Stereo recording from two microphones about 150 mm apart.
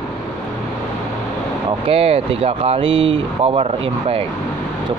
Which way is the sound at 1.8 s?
40° right (ahead or behind).